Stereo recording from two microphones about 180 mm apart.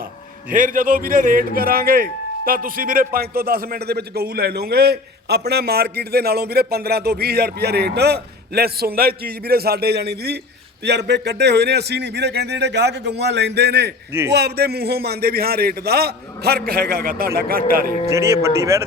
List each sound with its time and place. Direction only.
0.5 s a man's voice: 50° right (ahead or behind)
18.1 s speech: 15° right (ahead or behind)